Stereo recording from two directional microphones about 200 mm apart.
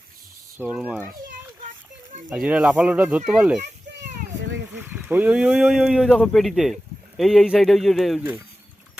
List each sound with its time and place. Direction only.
0.6 s speech: 5° right (ahead or behind)
2.3 s speech: 5° right (ahead or behind)
4.9 s speech: 5° right (ahead or behind)